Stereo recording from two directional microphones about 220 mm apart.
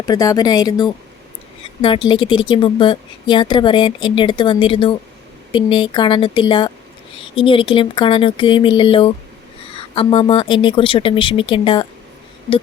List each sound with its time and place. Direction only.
0.0 s a woman's voice: 15° left (ahead or behind)
2.0 s speech: 20° left (ahead or behind)